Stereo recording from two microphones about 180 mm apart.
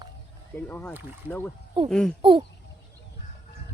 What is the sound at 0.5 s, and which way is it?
Speech, 10° left (ahead or behind).